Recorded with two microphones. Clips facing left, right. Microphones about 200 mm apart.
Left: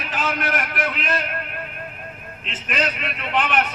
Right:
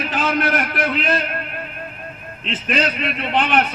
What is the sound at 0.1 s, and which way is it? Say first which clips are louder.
A man's voice: right 4 dB; 35° right (ahead or behind).